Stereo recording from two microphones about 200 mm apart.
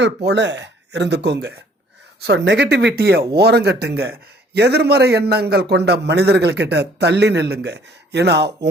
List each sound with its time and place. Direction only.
0.0 s a man's voice: 60° right (ahead or behind)